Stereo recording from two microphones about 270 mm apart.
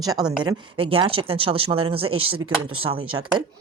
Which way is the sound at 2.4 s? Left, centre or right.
Right.